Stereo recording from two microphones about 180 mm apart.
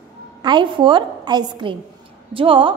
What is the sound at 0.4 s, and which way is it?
A woman's voice, 25° right (ahead or behind).